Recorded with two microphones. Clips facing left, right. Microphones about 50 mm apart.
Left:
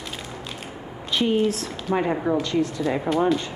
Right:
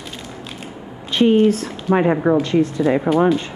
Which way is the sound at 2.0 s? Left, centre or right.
Right.